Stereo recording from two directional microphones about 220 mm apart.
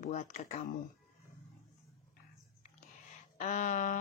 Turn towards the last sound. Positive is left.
turn(degrees=35)  # may be behind; listen again after turning